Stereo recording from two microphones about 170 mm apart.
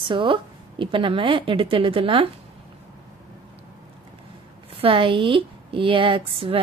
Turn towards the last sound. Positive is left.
turn(degrees=-30)  # may be behind; listen again after turning